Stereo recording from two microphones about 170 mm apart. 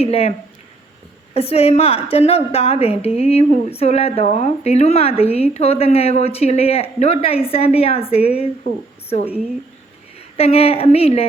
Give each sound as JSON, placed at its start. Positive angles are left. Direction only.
{"t": 0.0, "sound": "speech", "side_deg": 35}
{"t": 10.3, "sound": "speech", "side_deg": 35}